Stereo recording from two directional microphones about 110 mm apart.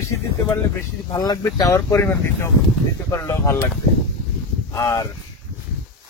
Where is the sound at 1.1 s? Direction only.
35° left (ahead or behind).